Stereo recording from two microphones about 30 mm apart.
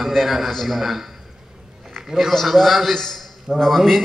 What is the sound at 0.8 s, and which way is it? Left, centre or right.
Speech, centre.